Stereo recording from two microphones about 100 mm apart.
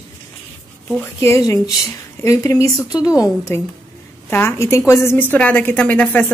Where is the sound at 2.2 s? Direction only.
30° left (ahead or behind).